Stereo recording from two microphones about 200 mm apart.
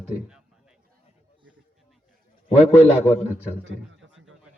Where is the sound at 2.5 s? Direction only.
30° left (ahead or behind).